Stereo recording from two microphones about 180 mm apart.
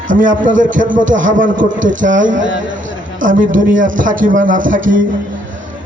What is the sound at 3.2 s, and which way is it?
Speech, 45° right (ahead or behind).